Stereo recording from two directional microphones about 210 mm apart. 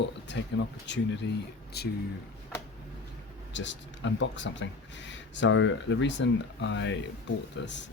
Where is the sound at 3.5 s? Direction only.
60° left (ahead or behind).